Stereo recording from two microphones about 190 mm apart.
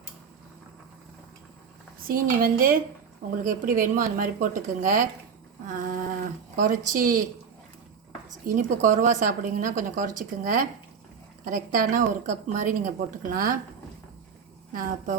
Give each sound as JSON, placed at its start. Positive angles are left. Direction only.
{"t": 2.0, "sound": "a woman's voice", "side_deg": -50}
{"t": 6.6, "sound": "a woman's voice", "side_deg": -45}
{"t": 8.4, "sound": "a woman's voice", "side_deg": -45}
{"t": 14.7, "sound": "a woman's voice", "side_deg": -45}